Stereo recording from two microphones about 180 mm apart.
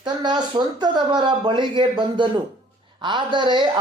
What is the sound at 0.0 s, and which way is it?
Speech, 25° right (ahead or behind).